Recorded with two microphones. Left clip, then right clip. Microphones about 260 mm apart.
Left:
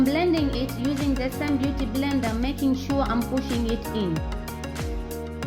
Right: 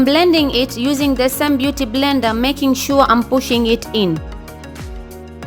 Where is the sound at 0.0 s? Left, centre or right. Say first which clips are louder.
Right 10 dB; right.